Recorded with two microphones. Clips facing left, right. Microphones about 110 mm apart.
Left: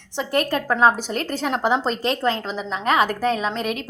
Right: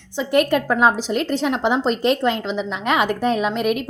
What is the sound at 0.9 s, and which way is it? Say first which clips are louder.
A woman's voice: right 5 dB; 50° left (ahead or behind).